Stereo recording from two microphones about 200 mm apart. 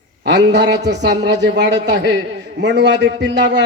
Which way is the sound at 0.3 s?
60° right (ahead or behind).